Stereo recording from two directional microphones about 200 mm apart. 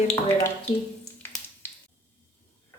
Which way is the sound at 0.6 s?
10° left (ahead or behind).